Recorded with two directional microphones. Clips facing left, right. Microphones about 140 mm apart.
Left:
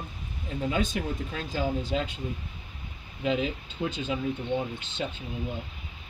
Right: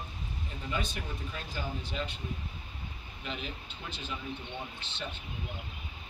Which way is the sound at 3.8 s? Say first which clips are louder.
Left 14 dB; 90° left.